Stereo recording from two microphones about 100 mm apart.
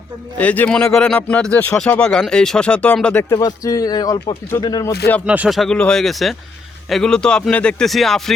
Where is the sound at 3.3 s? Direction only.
40° left (ahead or behind).